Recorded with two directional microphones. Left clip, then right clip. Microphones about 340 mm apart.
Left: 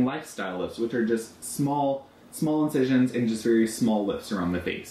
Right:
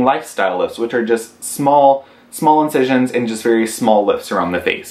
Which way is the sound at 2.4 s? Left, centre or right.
Centre.